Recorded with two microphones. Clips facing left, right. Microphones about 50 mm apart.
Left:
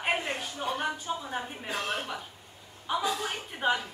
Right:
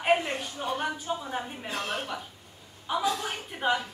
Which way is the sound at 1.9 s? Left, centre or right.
Centre.